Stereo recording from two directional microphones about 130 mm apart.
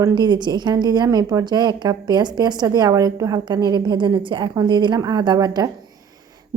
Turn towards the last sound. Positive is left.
turn(degrees=-30)  # may be behind; listen again after turning